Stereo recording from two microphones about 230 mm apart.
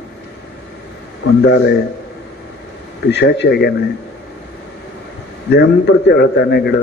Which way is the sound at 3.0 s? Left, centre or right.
Left.